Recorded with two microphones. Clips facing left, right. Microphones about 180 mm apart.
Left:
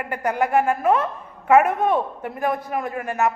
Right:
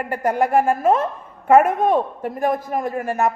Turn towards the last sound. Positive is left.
turn(degrees=-35)  # may be behind; listen again after turning